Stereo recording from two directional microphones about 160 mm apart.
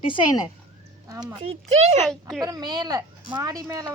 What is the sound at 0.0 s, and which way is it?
Speech, 30° left (ahead or behind).